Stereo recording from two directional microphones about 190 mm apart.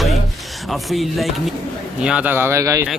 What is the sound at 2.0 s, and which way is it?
Speech, 5° right (ahead or behind).